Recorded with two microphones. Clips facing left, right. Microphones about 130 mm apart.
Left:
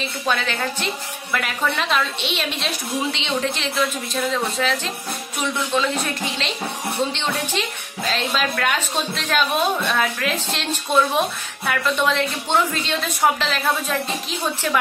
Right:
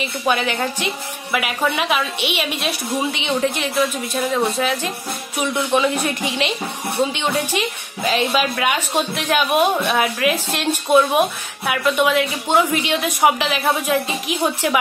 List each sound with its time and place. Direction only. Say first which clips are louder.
0.3 s a woman's voice: right 3 dB; 15° right (ahead or behind)